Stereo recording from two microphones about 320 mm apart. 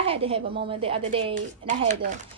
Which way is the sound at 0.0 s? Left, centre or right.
Centre.